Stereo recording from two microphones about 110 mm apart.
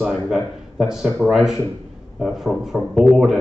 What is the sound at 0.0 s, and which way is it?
A man's voice, 5° right (ahead or behind).